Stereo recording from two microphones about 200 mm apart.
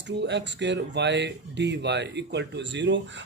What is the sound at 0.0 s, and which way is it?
Speech, 60° right (ahead or behind).